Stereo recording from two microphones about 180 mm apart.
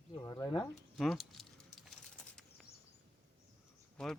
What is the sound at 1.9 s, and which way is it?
Bird flight, centre (ahead or behind).